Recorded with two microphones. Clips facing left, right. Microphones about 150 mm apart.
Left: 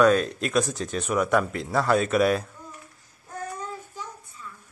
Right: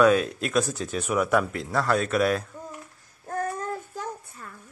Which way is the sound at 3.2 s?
60° right (ahead or behind).